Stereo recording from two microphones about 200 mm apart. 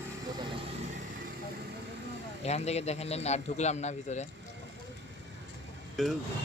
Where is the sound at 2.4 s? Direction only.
30° left (ahead or behind).